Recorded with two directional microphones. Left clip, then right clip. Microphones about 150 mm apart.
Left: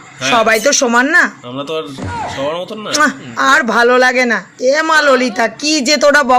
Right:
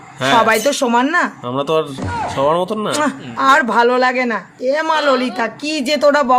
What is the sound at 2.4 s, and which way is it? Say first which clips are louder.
Speech: right 8 dB; 60° right (ahead or behind).